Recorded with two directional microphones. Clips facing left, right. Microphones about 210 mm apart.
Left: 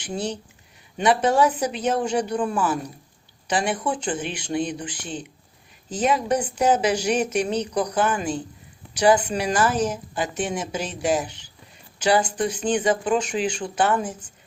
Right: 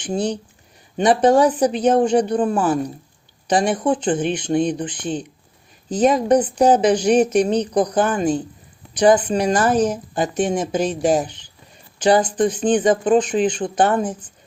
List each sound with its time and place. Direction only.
0.0 s speech: 30° right (ahead or behind)